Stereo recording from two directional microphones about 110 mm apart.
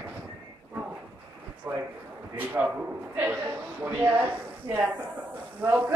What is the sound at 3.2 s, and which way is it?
A man's voice, 15° right (ahead or behind).